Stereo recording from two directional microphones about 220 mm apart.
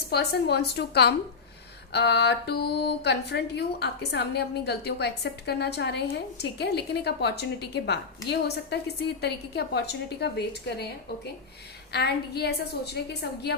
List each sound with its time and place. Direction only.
0.1 s speech: 50° left (ahead or behind)